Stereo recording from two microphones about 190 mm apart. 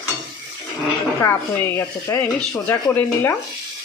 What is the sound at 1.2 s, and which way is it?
Speech, 15° left (ahead or behind).